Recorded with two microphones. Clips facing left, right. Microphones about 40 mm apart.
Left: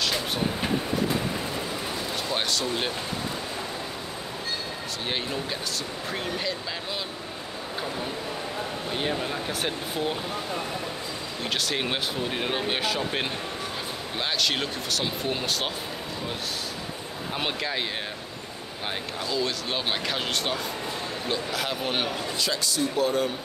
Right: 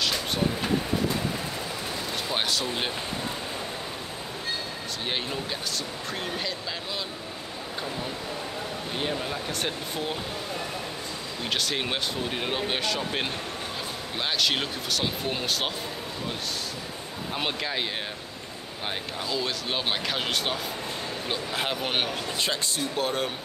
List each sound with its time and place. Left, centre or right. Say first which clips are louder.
2.2 s speech: even; centre
8.9 s speech: left 2 dB; centre
11.5 s speech: even; centre
14.4 s speech: even; centre
17.4 s speech: even; centre
19.2 s speech: left 2 dB; centre
21.5 s speech: even; right